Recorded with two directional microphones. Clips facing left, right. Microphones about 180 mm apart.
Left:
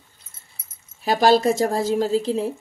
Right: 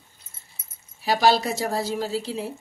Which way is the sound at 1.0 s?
50° left (ahead or behind).